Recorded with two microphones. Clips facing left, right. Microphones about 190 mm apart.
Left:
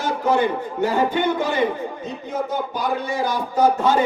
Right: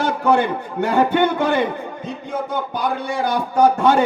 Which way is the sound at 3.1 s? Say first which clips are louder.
Right 2 dB; 65° right (ahead or behind).